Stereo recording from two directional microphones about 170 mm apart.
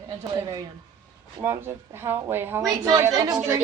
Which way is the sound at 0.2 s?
20° right (ahead or behind).